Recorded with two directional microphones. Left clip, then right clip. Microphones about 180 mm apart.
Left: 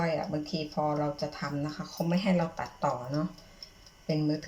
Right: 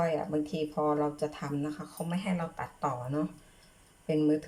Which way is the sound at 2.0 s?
Centre (ahead or behind).